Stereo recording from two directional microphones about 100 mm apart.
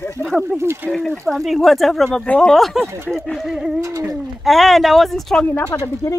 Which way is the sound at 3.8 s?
35° right (ahead or behind).